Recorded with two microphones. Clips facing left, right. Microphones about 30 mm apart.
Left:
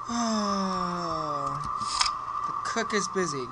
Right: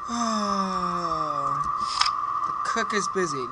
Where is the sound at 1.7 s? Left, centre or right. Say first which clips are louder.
Right 4 dB; centre.